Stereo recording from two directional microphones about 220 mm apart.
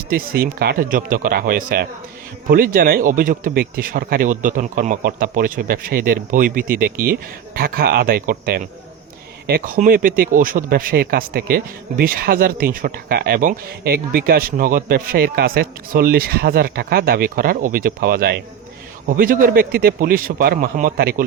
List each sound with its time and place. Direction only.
0.1 s speech: 40° right (ahead or behind)
6.9 s speech: 10° right (ahead or behind)
7.5 s speech: 45° right (ahead or behind)